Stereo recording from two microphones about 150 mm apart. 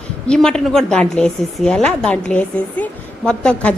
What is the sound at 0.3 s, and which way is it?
Speech, 5° left (ahead or behind).